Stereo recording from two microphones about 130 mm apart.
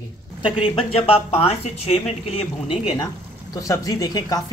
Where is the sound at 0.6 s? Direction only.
45° left (ahead or behind).